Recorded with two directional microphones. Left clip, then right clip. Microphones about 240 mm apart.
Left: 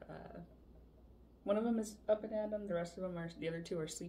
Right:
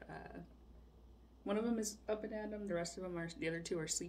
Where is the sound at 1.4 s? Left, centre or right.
Right.